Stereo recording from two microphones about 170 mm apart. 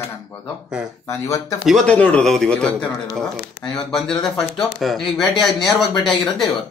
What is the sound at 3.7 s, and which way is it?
Speech, centre (ahead or behind).